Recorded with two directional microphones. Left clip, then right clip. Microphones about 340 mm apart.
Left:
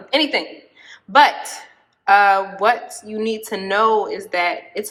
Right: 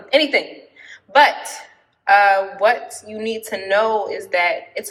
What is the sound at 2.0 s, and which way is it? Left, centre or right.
Speech, centre.